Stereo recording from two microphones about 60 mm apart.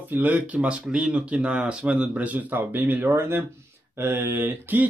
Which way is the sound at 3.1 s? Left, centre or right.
Right.